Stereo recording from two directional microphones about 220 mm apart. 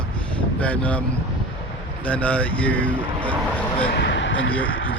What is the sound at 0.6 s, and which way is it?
Speech, 5° left (ahead or behind).